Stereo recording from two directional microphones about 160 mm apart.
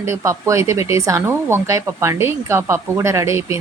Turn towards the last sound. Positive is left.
turn(degrees=-20)  # may be behind; listen again after turning